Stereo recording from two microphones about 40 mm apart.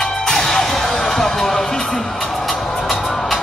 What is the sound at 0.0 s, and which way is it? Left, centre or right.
Music, centre.